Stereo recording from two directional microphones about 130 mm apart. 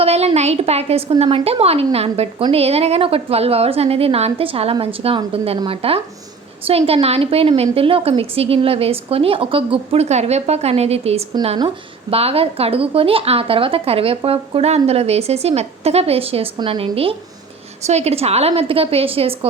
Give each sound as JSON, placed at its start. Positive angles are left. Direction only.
{"t": 0.0, "sound": "a woman's voice", "side_deg": -50}
{"t": 11.4, "sound": "a woman's voice", "side_deg": -40}